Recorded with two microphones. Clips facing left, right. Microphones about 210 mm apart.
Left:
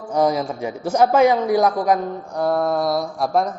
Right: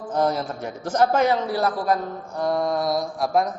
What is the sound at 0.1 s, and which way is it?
Speech, 10° left (ahead or behind).